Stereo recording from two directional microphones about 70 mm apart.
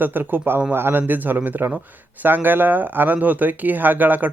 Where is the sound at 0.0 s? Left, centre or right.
Right.